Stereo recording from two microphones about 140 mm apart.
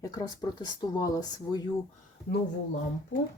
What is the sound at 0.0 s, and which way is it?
Speech, 25° left (ahead or behind).